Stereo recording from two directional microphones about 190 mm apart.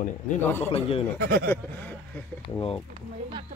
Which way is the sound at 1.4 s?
10° left (ahead or behind).